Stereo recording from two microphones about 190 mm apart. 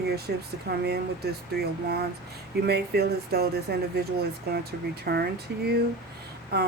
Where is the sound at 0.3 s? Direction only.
55° right (ahead or behind).